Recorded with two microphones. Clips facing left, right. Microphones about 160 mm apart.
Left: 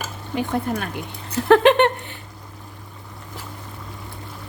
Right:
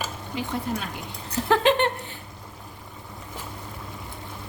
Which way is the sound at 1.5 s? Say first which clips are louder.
Left 7 dB; 65° left (ahead or behind).